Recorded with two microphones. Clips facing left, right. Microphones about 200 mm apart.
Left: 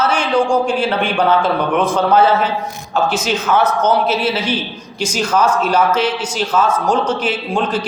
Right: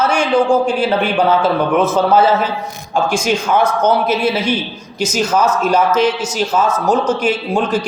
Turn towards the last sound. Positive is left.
turn(degrees=-10)  # may be behind; listen again after turning